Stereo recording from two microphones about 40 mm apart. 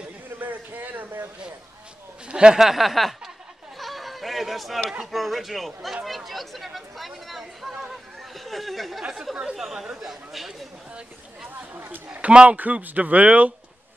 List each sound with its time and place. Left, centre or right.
0.4 s a sound: right
2.2 s speech: right
2.6 s speech: centre
3.7 s a sound: centre
5.0 s speech: centre
11.7 s a man's voice: right
12.1 s speech: right
12.5 s speech: right